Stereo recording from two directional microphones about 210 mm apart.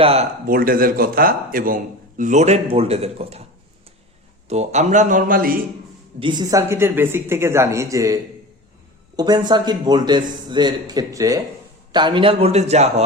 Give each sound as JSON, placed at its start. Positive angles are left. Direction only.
{"t": 0.0, "sound": "a man's voice", "side_deg": -30}
{"t": 0.4, "sound": "a man's voice", "side_deg": -45}
{"t": 4.4, "sound": "a man's voice", "side_deg": -30}
{"t": 6.1, "sound": "a man's voice", "side_deg": -20}